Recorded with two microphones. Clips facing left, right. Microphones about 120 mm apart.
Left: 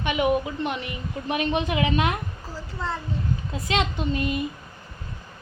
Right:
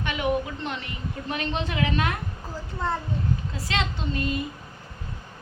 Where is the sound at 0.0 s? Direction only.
15° left (ahead or behind).